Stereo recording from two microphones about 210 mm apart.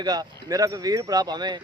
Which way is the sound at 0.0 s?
20° right (ahead or behind).